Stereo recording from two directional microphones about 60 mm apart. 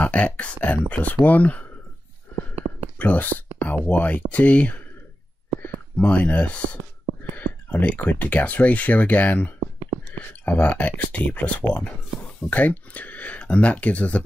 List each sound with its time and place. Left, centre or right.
0.0 s speech: left
2.6 s whispering: centre
3.0 s speech: left